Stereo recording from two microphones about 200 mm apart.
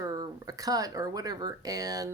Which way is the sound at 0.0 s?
20° right (ahead or behind).